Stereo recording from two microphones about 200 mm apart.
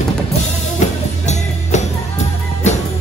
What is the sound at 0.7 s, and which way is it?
Music, 35° left (ahead or behind).